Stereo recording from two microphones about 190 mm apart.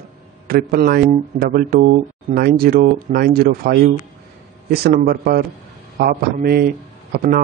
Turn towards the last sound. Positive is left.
turn(degrees=-45)  # may be behind; listen again after turning